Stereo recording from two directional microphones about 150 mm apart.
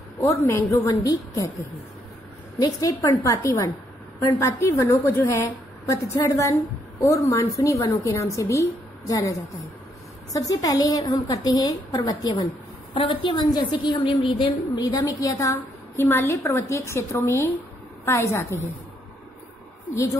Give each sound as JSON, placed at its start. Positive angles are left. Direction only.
{"t": 0.2, "sound": "a woman's voice", "side_deg": 20}